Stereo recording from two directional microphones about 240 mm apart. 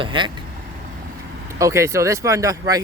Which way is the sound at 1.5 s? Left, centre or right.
Centre.